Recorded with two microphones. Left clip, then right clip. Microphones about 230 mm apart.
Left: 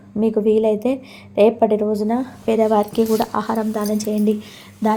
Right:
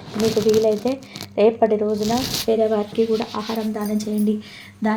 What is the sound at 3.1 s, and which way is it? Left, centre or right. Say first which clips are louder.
Speech: left 4 dB; centre.